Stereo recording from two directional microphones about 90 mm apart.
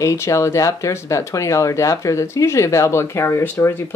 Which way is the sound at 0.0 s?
35° left (ahead or behind).